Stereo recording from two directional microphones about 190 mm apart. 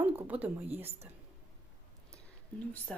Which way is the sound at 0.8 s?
30° right (ahead or behind).